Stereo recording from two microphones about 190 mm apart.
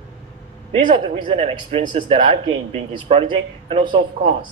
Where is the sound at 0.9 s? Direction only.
30° right (ahead or behind).